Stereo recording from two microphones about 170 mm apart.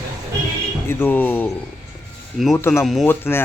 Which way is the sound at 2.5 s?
15° left (ahead or behind).